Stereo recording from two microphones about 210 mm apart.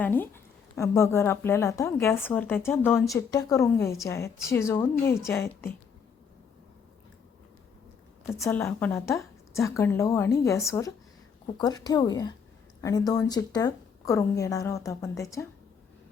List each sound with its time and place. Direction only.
0.0 s a woman's voice: 10° left (ahead or behind)
8.3 s a woman's voice: 10° left (ahead or behind)